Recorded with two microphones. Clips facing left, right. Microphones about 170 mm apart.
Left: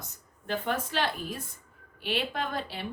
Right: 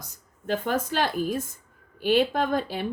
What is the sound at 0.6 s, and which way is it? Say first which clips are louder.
Speech: right 3 dB; 40° right (ahead or behind).